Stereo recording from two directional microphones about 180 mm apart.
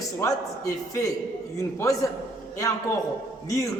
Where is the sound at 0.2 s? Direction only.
15° left (ahead or behind).